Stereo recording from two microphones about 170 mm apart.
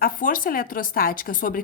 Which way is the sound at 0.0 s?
55° left (ahead or behind).